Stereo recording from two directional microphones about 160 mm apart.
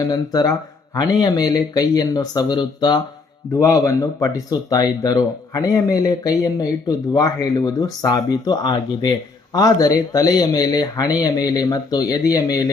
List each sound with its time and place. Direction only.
0.0 s speech: 25° left (ahead or behind)